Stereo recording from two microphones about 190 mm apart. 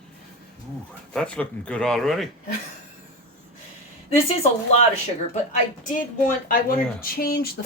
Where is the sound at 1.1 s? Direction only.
5° left (ahead or behind).